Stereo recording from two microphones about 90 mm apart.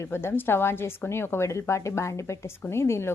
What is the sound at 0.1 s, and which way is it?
A woman's voice, 25° left (ahead or behind).